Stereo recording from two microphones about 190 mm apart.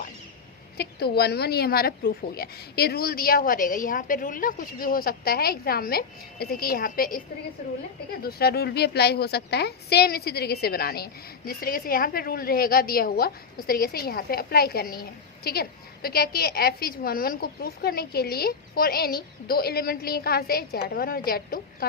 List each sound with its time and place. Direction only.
0.8 s a woman's voice: 55° left (ahead or behind)
8.2 s a woman's voice: 55° left (ahead or behind)